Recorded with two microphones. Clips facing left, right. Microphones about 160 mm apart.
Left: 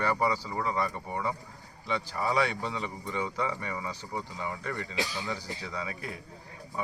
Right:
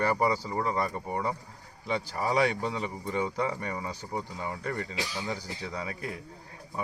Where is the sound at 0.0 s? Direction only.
40° right (ahead or behind).